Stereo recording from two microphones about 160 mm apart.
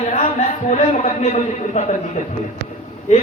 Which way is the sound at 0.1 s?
45° left (ahead or behind).